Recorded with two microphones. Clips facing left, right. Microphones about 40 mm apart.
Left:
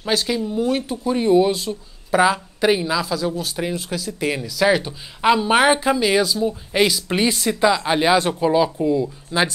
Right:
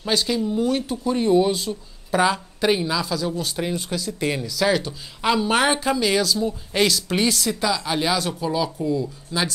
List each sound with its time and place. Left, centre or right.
0.0 s a woman's voice: centre; by 9.5 s left